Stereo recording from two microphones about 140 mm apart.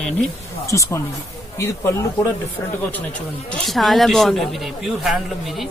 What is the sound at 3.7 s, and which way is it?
Speech, centre (ahead or behind).